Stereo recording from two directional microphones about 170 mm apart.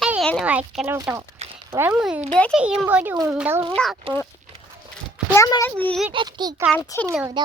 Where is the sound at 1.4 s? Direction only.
40° right (ahead or behind).